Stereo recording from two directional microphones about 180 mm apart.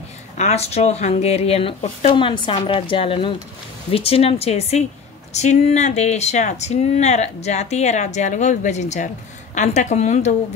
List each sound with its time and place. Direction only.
0.4 s speech: 35° left (ahead or behind)